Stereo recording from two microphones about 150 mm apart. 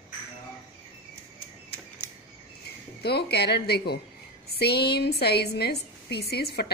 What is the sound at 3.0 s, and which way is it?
A woman's voice, 90° left.